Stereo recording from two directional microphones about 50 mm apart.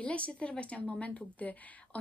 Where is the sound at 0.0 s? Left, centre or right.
Left.